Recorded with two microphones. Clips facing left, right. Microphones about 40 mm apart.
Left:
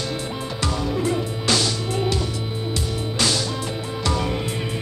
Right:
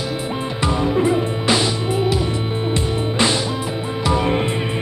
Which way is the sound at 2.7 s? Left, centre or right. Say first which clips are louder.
Right 5 dB; right.